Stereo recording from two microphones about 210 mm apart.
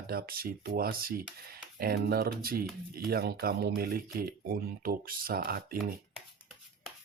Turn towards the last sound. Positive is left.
turn(degrees=-45)  # may be behind; listen again after turning